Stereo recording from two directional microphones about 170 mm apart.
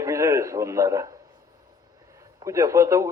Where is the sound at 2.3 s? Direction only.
20° right (ahead or behind).